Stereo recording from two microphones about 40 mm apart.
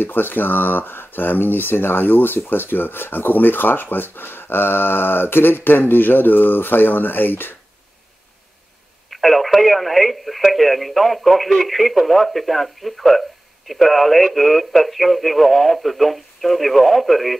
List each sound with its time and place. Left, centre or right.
0.0 s speech: left
9.1 s speech: centre